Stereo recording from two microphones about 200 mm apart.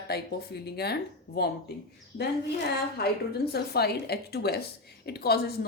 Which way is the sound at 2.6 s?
50° left (ahead or behind).